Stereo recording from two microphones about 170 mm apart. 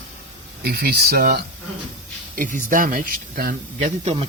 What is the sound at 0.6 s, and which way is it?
Speech, 65° right (ahead or behind).